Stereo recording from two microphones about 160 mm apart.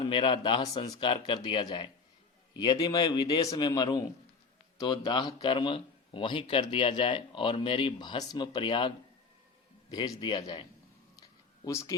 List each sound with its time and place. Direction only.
0.0 s a man's voice: 30° left (ahead or behind)
9.9 s a man's voice: 25° left (ahead or behind)